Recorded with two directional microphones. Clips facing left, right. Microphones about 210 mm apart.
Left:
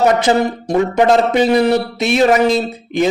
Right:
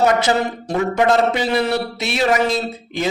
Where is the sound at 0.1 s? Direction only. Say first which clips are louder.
Left 4 dB; 20° left (ahead or behind).